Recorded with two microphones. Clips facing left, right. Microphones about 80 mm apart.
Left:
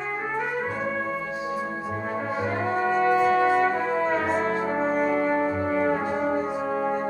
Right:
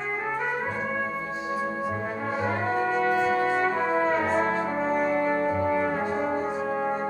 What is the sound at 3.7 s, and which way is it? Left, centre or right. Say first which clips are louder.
Brass instrument: even; right.